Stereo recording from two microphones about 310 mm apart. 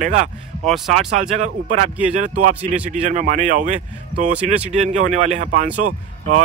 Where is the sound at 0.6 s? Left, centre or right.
Centre.